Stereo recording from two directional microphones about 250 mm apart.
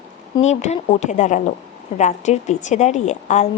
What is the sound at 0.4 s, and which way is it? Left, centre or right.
A woman's voice, left.